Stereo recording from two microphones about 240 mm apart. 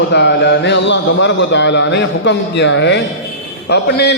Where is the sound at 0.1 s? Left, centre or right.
Left.